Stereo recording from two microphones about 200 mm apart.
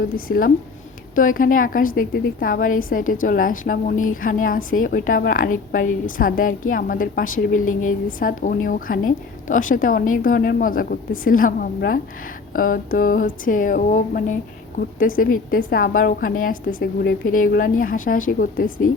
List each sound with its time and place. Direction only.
0.3 s a woman's voice: 45° left (ahead or behind)